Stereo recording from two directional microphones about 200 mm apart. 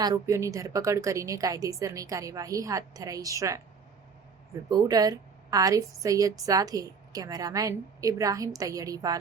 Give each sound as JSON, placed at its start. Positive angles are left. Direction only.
{"t": 0.0, "sound": "a woman's voice", "side_deg": -15}
{"t": 4.7, "sound": "a woman's voice", "side_deg": -20}